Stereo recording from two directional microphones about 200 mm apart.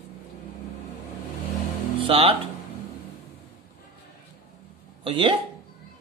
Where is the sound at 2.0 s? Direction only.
25° right (ahead or behind).